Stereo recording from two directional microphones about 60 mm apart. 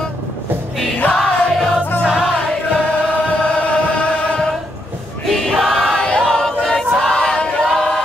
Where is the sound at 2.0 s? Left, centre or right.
Centre.